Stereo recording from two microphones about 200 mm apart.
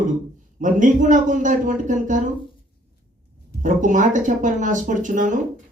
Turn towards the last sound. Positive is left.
turn(degrees=-40)  # may be behind; listen again after turning